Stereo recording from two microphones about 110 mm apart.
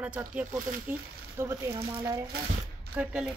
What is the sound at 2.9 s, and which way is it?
Speech, 10° right (ahead or behind).